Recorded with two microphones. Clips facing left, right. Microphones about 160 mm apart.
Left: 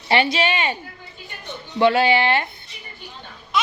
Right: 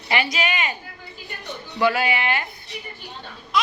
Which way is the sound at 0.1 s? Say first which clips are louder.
Left 5 dB; 30° left (ahead or behind).